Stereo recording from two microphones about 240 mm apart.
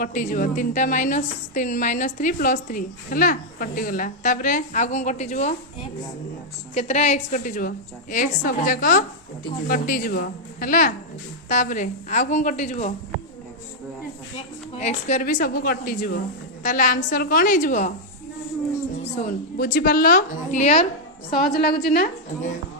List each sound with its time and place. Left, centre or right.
0.0 s a woman's voice: left
6.7 s a woman's voice: left
14.8 s a woman's voice: left
19.1 s a woman's voice: left
21.2 s a woman's voice: left